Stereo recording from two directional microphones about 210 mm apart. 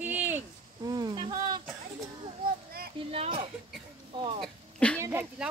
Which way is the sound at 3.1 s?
30° right (ahead or behind).